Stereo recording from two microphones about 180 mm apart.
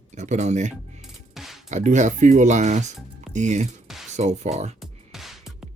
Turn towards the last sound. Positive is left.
turn(degrees=0)  # may be behind; listen again after turning